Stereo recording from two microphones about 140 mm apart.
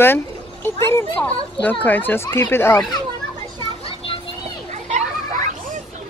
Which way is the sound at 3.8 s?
40° left (ahead or behind).